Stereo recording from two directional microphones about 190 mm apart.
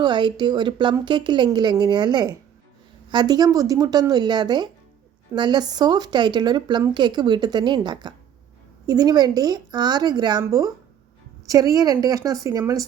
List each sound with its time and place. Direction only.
0.0 s a woman's voice: 25° right (ahead or behind)